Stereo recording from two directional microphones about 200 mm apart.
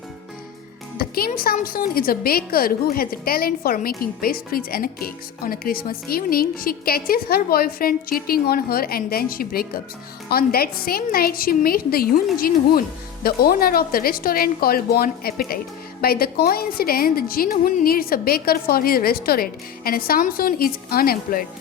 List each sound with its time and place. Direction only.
0.9 s a woman's voice: 50° left (ahead or behind)